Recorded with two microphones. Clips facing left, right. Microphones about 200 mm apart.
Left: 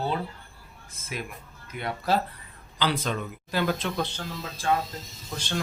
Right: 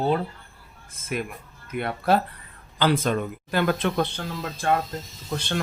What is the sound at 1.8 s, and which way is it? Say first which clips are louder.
Speech: right 4 dB; 60° right (ahead or behind).